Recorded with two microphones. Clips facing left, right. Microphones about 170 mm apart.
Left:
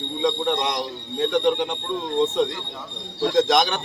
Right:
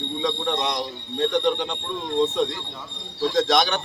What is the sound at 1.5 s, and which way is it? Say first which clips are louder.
Speech: left 2 dB; 20° left (ahead or behind).